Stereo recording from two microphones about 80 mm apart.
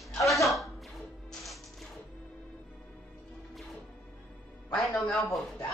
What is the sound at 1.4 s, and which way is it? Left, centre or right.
Music, centre.